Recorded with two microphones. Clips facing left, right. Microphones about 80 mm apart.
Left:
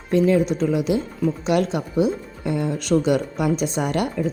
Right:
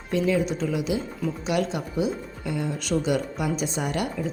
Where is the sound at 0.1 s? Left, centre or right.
Left.